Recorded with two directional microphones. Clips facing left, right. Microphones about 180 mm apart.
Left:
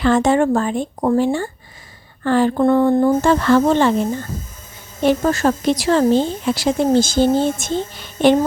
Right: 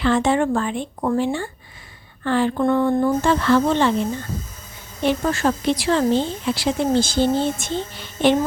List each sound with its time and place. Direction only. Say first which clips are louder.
0.0 s speech: left 4 dB; 45° left (ahead or behind)
2.2 s a sound: left 4 dB; 40° left (ahead or behind)
3.2 s speech: left 3 dB; 45° left (ahead or behind)
5.0 s speech: left 4 dB; 40° left (ahead or behind)